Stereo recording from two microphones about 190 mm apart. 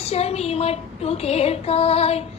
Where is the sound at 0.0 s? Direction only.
35° left (ahead or behind).